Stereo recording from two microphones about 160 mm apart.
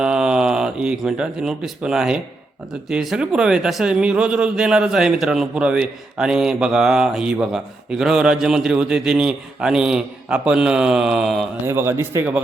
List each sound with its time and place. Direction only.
0.0 s speech: 5° right (ahead or behind)
11.6 s speech: 15° right (ahead or behind)